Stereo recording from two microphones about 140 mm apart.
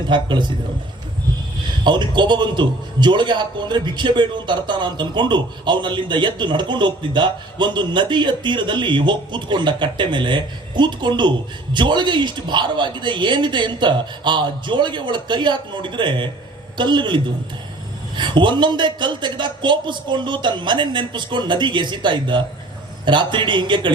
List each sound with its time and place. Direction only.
0.1 s a man's voice: 35° right (ahead or behind)
1.8 s a man's voice: 35° right (ahead or behind)
18.2 s a man's voice: 35° right (ahead or behind)